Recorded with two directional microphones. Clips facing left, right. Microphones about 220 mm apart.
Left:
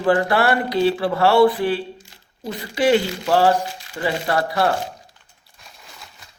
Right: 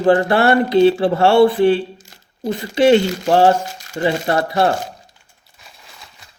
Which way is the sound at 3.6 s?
45° right (ahead or behind).